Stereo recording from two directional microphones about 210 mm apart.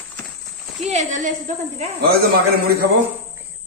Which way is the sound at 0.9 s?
35° right (ahead or behind).